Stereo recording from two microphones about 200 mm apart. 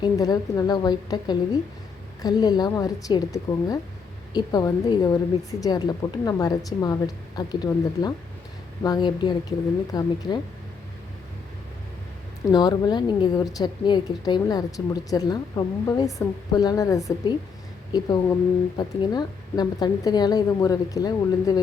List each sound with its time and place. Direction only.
0.0 s a woman's voice: 20° left (ahead or behind)
12.5 s a woman's voice: 20° left (ahead or behind)